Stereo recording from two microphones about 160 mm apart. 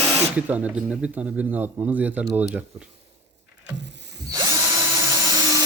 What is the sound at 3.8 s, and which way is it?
Vehicle, 90° right.